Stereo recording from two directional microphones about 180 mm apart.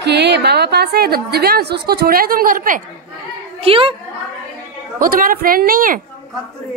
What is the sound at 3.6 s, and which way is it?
Speech, 30° right (ahead or behind).